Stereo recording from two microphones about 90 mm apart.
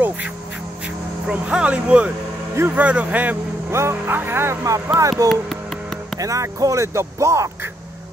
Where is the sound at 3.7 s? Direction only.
30° right (ahead or behind).